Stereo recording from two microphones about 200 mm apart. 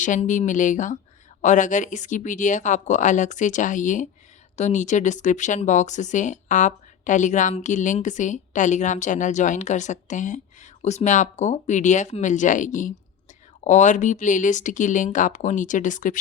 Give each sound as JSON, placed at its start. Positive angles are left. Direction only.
{"t": 0.0, "sound": "speech", "side_deg": 40}